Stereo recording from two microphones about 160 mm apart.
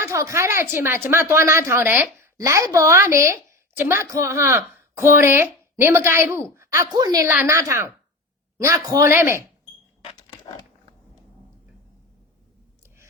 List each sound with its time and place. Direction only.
0.0 s a woman's voice: 20° right (ahead or behind)